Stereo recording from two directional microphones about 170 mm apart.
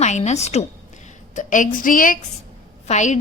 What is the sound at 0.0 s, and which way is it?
A woman's voice, 40° left (ahead or behind).